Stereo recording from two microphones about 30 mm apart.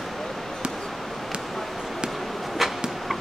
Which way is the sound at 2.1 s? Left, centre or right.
Centre.